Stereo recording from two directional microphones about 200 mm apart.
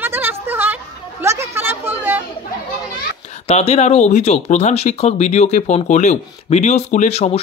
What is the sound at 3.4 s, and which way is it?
Speech, 30° left (ahead or behind).